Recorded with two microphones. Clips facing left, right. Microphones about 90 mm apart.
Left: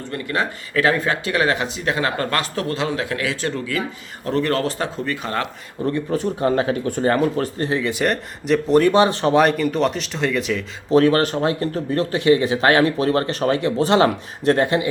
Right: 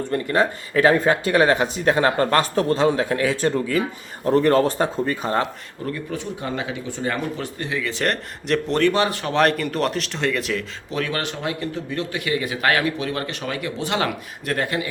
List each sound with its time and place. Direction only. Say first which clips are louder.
0.1 s speech: right 3 dB; 30° right (ahead or behind)
5.0 s speech: right 2 dB; 20° right (ahead or behind)
5.8 s speech: left 7 dB; 35° left (ahead or behind)
8.0 s speech: left 3 dB; 5° left (ahead or behind)
8.8 s speech: left 4 dB; 20° left (ahead or behind)
9.4 s speech: right 2 dB; centre (ahead or behind)
10.9 s speech: left 11 dB; 35° left (ahead or behind)